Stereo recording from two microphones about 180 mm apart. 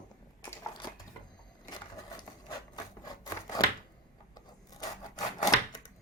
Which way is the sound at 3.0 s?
20° left (ahead or behind).